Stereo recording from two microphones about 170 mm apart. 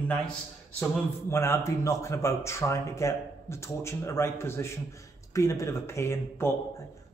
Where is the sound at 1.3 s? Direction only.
15° left (ahead or behind).